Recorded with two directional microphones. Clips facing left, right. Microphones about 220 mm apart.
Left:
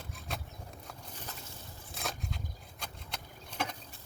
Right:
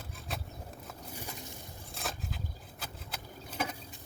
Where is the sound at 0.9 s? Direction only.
10° right (ahead or behind).